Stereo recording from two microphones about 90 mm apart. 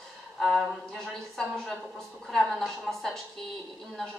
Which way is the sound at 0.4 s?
Centre (ahead or behind).